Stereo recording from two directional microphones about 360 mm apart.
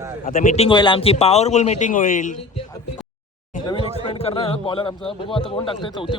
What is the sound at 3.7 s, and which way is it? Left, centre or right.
A man's voice, centre.